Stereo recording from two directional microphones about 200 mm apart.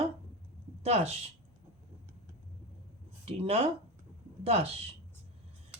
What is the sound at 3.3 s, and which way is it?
A woman's voice, 30° right (ahead or behind).